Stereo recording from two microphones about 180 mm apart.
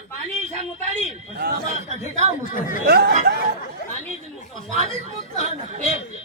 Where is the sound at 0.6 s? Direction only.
40° right (ahead or behind).